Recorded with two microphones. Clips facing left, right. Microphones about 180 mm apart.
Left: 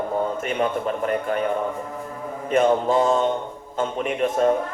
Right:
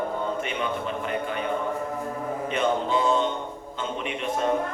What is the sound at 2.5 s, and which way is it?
A man's voice, 45° left (ahead or behind).